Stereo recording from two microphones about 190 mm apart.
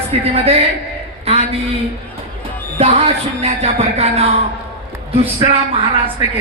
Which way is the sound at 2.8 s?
35° right (ahead or behind).